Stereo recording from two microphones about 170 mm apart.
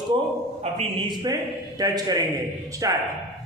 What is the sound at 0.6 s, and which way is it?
A man's voice, 35° right (ahead or behind).